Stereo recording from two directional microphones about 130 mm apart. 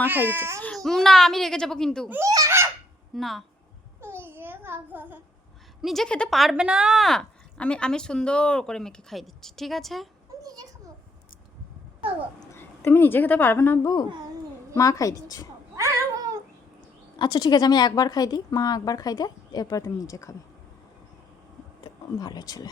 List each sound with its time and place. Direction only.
0.0 s speech: 15° right (ahead or behind)
0.9 s speech: centre (ahead or behind)
2.0 s a child's voice: 20° right (ahead or behind)
3.2 s speech: centre (ahead or behind)
4.0 s babbling: 15° right (ahead or behind)
5.8 s speech: centre (ahead or behind)
10.4 s a sound: 30° right (ahead or behind)
12.5 s speech: 15° left (ahead or behind)
14.8 s a woman's voice: 25° left (ahead or behind)
15.7 s a sound: 25° right (ahead or behind)
17.2 s a woman's voice: 35° left (ahead or behind)
22.2 s a woman's voice: 30° left (ahead or behind)